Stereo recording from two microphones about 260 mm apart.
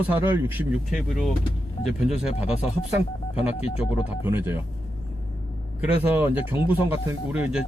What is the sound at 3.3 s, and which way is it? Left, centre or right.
Speech, left.